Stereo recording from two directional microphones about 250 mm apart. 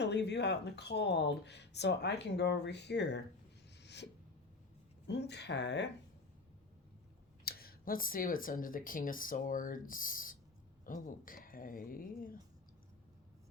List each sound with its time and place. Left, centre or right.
0.0 s speech: left
3.8 s a sound: left
5.0 s speech: left
7.4 s speech: left